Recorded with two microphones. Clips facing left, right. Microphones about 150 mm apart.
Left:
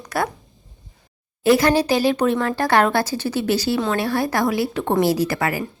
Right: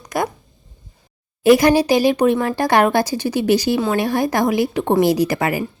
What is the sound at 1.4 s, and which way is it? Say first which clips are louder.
Speech: right 4 dB; 15° right (ahead or behind).